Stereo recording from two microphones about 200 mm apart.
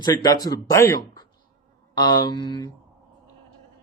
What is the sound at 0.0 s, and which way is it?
Speech, 20° left (ahead or behind).